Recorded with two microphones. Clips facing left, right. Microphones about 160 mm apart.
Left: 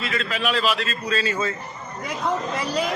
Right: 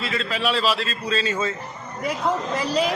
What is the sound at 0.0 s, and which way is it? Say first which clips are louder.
A man's voice: right 1 dB; 30° right (ahead or behind).